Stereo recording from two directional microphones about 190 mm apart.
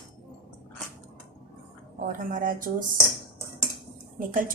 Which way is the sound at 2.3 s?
45° right (ahead or behind).